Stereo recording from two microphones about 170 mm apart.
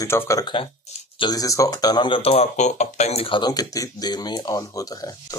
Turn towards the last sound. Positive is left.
turn(degrees=20)  # may be behind; listen again after turning